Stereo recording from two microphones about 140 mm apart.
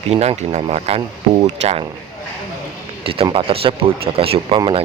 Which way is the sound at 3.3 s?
40° right (ahead or behind).